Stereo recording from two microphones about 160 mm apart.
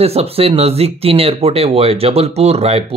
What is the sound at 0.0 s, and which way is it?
Speech, 40° right (ahead or behind).